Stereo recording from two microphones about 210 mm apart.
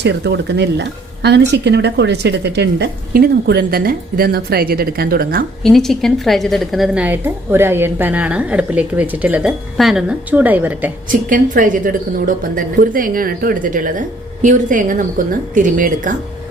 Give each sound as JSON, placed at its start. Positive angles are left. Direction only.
{"t": 0.0, "sound": "speech", "side_deg": -55}
{"t": 5.6, "sound": "a woman's voice", "side_deg": 0}
{"t": 11.1, "sound": "a woman's voice", "side_deg": -40}